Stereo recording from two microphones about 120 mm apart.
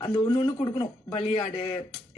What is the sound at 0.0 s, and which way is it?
A man's voice, 40° left (ahead or behind).